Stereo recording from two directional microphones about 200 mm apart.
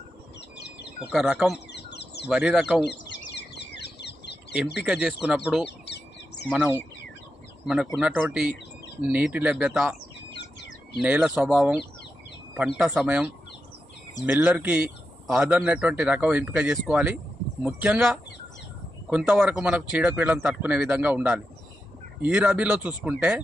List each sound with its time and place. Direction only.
0.5 s bird: 55° left (ahead or behind)
1.0 s speech: 5° right (ahead or behind)
1.5 s bird: 55° left (ahead or behind)
2.2 s speech: 5° right (ahead or behind)
3.3 s bird: 55° left (ahead or behind)
4.8 s speech: 5° right (ahead or behind)
5.6 s bird: 60° left (ahead or behind)
6.5 s speech: 5° right (ahead or behind)
7.9 s speech: 5° right (ahead or behind)
10.3 s bird: 60° left (ahead or behind)
11.0 s speech: 5° right (ahead or behind)
14.3 s speech: 10° right (ahead or behind)